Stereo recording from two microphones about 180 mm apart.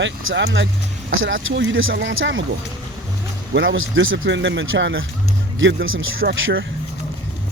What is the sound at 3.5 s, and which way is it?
Speech, 90° right.